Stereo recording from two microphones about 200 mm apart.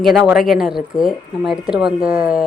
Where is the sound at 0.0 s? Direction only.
Centre (ahead or behind).